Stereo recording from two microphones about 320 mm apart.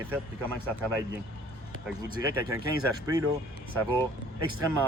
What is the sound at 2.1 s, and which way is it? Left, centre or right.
Speech, centre.